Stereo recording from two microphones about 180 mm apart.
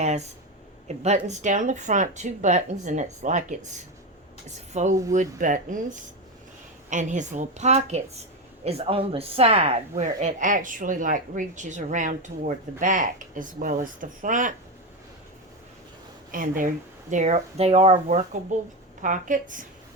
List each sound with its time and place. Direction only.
0.0 s a woman's voice: 40° right (ahead or behind)
16.3 s a woman's voice: 50° right (ahead or behind)
19.0 s speech: 45° right (ahead or behind)